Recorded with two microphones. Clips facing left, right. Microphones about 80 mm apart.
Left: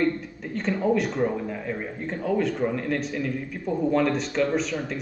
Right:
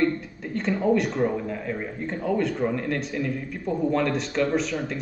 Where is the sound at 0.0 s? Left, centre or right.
Centre.